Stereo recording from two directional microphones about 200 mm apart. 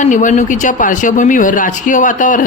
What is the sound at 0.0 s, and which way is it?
Speech, 40° left (ahead or behind).